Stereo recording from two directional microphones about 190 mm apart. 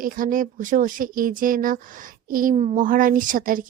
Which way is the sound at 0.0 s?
45° right (ahead or behind).